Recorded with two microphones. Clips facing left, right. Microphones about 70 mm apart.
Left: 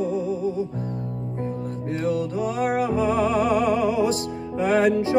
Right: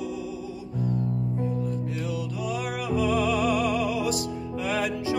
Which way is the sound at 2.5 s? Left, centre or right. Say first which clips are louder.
Left 6 dB; left.